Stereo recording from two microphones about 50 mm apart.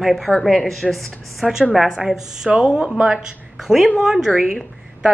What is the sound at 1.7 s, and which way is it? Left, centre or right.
A woman's voice, centre.